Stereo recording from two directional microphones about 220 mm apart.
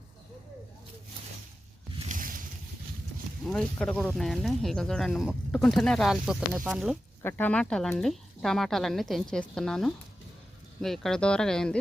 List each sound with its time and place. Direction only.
2.0 s a sound: 35° right (ahead or behind)
3.4 s speech: 5° left (ahead or behind)
7.2 s speech: 10° left (ahead or behind)